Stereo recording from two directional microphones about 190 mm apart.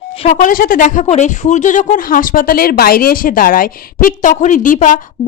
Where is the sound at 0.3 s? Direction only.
45° left (ahead or behind).